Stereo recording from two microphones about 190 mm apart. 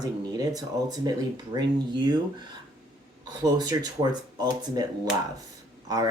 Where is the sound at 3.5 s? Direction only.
20° right (ahead or behind).